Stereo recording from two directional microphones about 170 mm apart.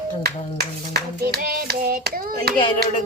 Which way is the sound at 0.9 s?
65° right (ahead or behind).